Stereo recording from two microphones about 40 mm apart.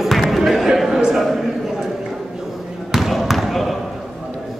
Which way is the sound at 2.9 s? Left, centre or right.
Centre.